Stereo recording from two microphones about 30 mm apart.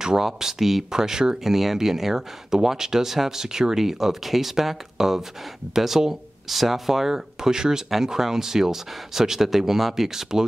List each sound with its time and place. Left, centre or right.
0.2 s speech: centre
0.9 s speech: right
1.4 s speech: centre